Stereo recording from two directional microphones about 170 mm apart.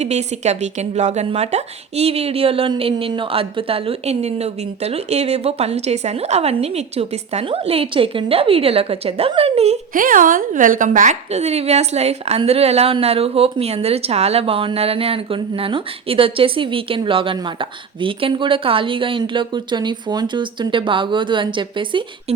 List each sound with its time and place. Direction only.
0.0 s a woman's voice: 40° right (ahead or behind)
9.9 s a woman's voice: 55° right (ahead or behind); by 22.0 s 30° right (ahead or behind)